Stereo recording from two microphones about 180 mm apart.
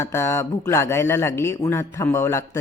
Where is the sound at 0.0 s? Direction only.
15° left (ahead or behind).